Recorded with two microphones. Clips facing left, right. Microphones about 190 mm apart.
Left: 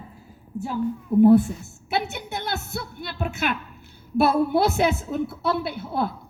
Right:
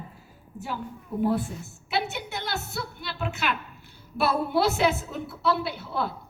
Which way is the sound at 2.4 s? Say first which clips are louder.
Left 2 dB; 55° left (ahead or behind).